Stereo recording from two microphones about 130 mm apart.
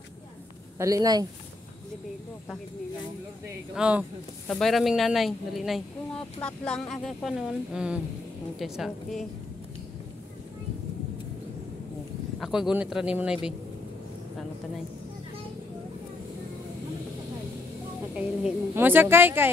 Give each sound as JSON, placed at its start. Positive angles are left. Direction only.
{"t": 0.7, "sound": "speech", "side_deg": -25}
{"t": 3.7, "sound": "a woman's voice", "side_deg": -10}
{"t": 4.5, "sound": "speech", "side_deg": 5}
{"t": 12.4, "sound": "speech", "side_deg": -5}
{"t": 18.1, "sound": "a woman's voice", "side_deg": -15}